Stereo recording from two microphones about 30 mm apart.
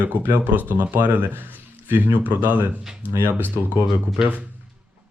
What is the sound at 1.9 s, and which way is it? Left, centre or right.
Speech, right.